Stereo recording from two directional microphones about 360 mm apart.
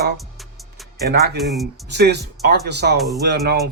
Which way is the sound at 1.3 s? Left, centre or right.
Centre.